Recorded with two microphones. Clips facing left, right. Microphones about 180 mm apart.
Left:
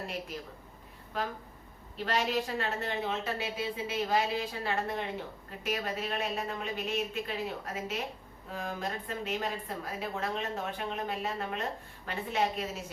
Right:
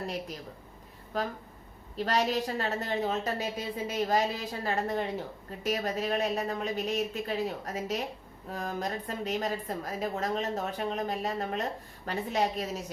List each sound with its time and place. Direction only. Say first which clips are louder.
1.1 s a woman's voice: right 3 dB; 40° right (ahead or behind)